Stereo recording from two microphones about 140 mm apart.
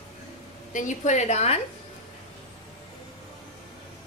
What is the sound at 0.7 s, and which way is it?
Speech, 60° left (ahead or behind).